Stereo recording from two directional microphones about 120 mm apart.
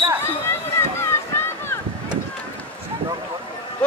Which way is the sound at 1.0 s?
20° left (ahead or behind).